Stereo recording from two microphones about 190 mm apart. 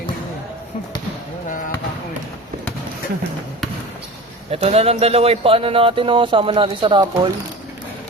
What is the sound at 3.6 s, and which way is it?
Basketball bounce, centre (ahead or behind).